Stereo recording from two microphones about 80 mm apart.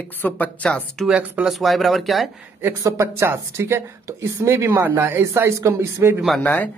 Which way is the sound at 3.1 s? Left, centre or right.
Right.